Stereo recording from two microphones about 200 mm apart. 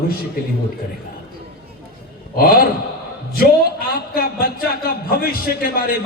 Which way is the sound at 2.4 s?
45° left (ahead or behind).